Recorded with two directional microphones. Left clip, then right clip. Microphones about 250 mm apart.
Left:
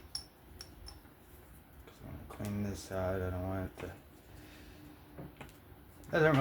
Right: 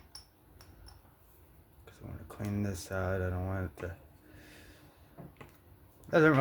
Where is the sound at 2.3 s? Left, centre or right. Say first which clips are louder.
Right 1 dB; right.